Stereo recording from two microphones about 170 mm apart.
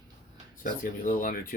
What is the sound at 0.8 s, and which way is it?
Speech, 55° left (ahead or behind).